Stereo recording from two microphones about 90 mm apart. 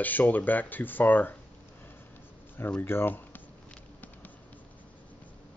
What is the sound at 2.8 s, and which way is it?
Speech, 25° left (ahead or behind).